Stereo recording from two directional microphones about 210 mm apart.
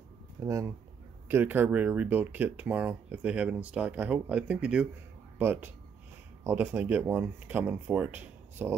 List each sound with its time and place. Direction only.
0.5 s speech: 15° right (ahead or behind)